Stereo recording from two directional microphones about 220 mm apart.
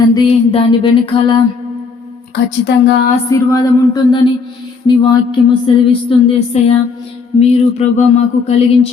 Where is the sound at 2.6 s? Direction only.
55° left (ahead or behind).